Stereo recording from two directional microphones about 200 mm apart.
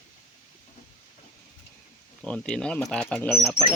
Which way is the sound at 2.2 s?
5° left (ahead or behind).